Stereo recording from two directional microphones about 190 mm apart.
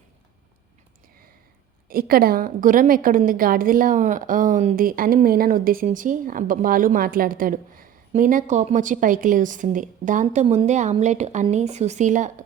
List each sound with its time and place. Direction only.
1.9 s a woman's voice: 50° right (ahead or behind)